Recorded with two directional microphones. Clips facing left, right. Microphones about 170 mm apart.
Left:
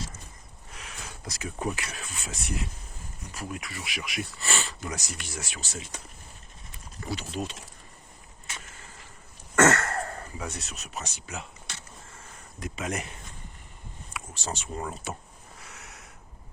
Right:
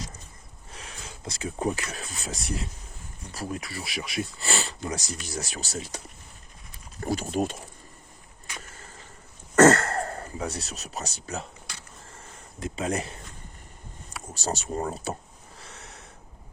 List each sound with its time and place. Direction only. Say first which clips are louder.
0.7 s speech: right 1 dB; 30° right (ahead or behind)
7.0 s speech: right 7 dB; 45° right (ahead or behind)
9.6 s throat clearing: right 5 dB; 30° right (ahead or behind)
12.1 s a sound: right 1 dB; 30° right (ahead or behind)